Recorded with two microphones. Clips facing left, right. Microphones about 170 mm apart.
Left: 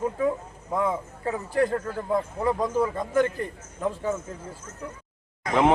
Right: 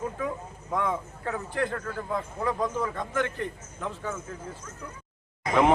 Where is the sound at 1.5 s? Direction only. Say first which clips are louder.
Left 8 dB; 35° left (ahead or behind).